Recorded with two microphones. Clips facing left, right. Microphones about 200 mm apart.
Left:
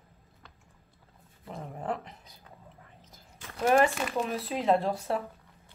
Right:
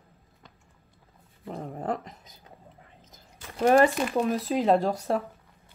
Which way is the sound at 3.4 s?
40° right (ahead or behind).